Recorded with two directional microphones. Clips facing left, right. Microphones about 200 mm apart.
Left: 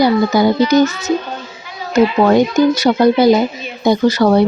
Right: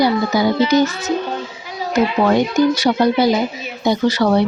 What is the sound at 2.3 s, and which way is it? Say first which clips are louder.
Speech: left 3 dB; 45° left (ahead or behind).